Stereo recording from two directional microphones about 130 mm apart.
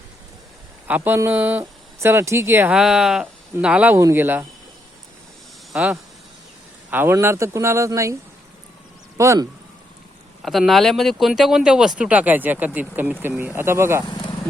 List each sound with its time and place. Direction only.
0.9 s speech: 15° right (ahead or behind)
2.7 s speech: 5° right (ahead or behind)
5.7 s speech: 10° right (ahead or behind)
9.1 s speech: 25° right (ahead or behind)
10.4 s speech: centre (ahead or behind); by 14.0 s 20° right (ahead or behind)